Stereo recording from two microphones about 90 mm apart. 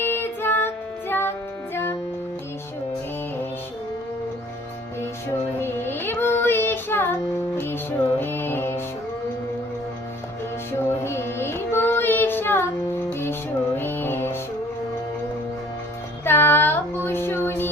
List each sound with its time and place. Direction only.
0.0 s child singing: 25° left (ahead or behind)
1.7 s music: 25° left (ahead or behind)
5.5 s child singing: 25° left (ahead or behind)
7.6 s music: 25° left (ahead or behind)
10.7 s music: 30° left (ahead or behind)
13.7 s music: 25° left (ahead or behind)
16.2 s music: 25° left (ahead or behind)